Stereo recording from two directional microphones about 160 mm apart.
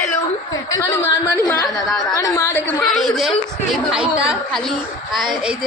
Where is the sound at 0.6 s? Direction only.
20° left (ahead or behind).